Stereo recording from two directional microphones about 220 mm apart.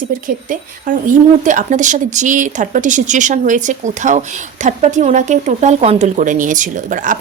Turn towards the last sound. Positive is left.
turn(degrees=-35)  # may be behind; listen again after turning